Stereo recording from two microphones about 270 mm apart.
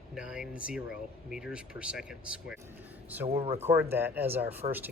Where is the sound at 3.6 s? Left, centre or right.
Centre.